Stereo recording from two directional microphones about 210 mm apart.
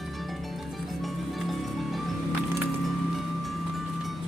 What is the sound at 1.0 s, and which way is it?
Music, centre (ahead or behind).